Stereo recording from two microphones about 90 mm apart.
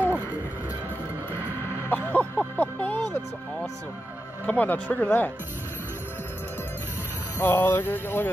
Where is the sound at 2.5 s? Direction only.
20° left (ahead or behind).